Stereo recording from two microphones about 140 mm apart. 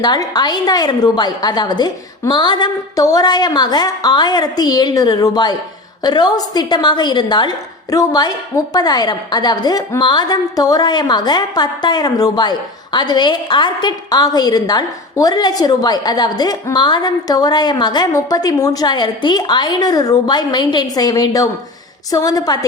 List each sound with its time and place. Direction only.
0.0 s a woman's voice: 30° left (ahead or behind)